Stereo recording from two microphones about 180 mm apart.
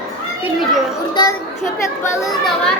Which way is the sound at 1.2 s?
25° left (ahead or behind).